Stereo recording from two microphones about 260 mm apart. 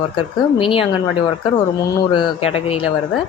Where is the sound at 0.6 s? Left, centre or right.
Centre.